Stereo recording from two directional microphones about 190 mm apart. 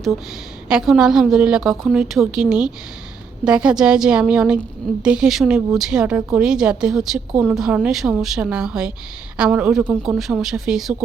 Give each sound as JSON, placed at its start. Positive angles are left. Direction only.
{"t": 0.7, "sound": "a woman's voice", "side_deg": -5}